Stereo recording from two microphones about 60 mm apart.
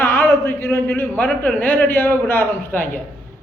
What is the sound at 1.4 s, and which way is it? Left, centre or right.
A woman's voice, left.